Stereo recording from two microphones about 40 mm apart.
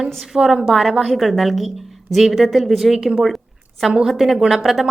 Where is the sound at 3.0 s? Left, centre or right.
Centre.